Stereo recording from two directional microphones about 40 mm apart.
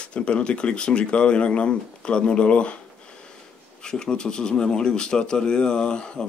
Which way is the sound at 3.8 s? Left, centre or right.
Centre.